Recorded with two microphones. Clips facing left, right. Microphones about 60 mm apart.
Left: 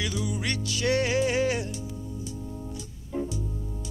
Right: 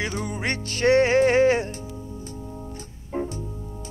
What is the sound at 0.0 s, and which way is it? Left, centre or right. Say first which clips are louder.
Music: right 3 dB; right.